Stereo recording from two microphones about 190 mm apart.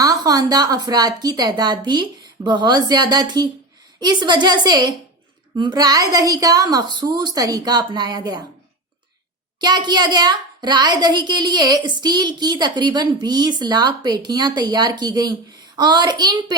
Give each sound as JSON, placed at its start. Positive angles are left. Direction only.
{"t": 0.0, "sound": "a woman's voice", "side_deg": -20}
{"t": 9.6, "sound": "a woman's voice", "side_deg": -20}